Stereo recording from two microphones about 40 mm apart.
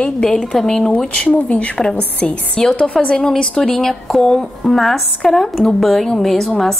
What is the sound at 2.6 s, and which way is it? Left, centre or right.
A woman's voice, centre.